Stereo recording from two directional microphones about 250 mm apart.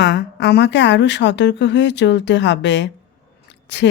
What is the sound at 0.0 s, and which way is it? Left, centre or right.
A woman's voice, left.